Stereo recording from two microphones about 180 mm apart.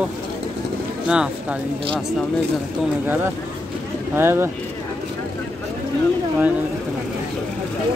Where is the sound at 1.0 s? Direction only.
5° right (ahead or behind).